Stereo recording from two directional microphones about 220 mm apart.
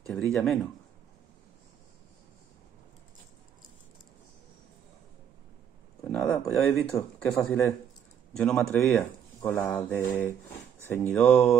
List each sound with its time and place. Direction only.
0.0 s speech: 5° left (ahead or behind)
6.1 s speech: centre (ahead or behind)